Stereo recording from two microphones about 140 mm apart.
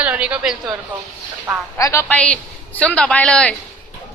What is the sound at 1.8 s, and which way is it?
Speech, 20° left (ahead or behind).